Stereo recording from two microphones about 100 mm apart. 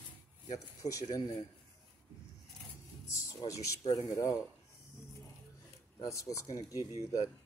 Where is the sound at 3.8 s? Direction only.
45° left (ahead or behind).